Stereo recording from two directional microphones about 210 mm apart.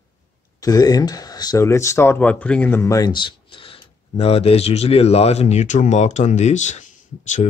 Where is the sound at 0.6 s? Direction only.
15° left (ahead or behind).